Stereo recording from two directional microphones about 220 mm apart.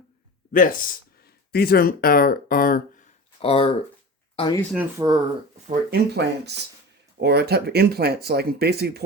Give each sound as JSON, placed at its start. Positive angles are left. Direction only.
{"t": 0.5, "sound": "speech", "side_deg": 40}
{"t": 3.4, "sound": "speech", "side_deg": 25}
{"t": 5.0, "sound": "speech", "side_deg": -15}
{"t": 5.6, "sound": "speech", "side_deg": -50}